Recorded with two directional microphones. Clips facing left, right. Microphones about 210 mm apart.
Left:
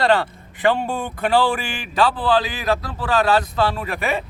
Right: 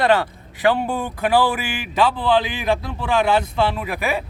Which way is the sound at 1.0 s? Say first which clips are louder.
Even; 5° right (ahead or behind).